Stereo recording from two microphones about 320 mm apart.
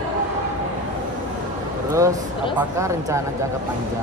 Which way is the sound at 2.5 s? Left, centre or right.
Centre.